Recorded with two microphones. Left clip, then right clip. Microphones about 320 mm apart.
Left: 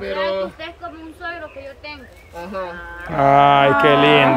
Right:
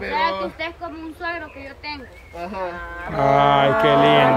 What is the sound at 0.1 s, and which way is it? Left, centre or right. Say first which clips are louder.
Speech: even; centre.